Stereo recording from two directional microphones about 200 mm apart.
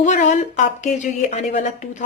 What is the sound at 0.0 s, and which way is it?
A woman's voice, 40° left (ahead or behind).